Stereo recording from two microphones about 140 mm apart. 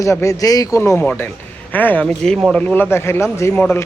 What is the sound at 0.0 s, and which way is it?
A man's voice, 20° left (ahead or behind).